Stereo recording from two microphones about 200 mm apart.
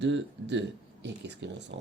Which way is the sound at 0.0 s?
60° right (ahead or behind).